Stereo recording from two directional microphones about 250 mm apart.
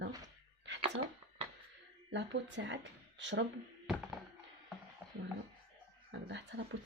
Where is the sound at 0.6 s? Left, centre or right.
Right.